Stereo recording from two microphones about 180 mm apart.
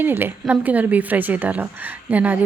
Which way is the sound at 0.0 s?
10° right (ahead or behind).